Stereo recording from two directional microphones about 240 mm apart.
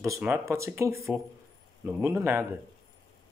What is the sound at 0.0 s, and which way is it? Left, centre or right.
Speech, centre.